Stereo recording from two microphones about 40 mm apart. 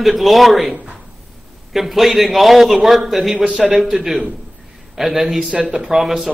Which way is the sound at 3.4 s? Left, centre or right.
Right.